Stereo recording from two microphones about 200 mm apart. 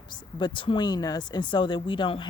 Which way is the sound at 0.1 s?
25° left (ahead or behind).